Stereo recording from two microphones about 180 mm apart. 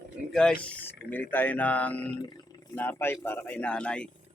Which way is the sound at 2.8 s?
10° left (ahead or behind).